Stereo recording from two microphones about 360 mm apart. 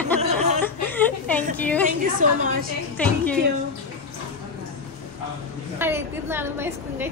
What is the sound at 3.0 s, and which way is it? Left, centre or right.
Speech, centre.